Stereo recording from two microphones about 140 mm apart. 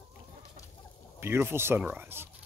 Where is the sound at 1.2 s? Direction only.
15° right (ahead or behind).